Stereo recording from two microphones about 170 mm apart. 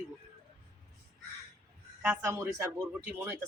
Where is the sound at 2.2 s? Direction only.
15° right (ahead or behind).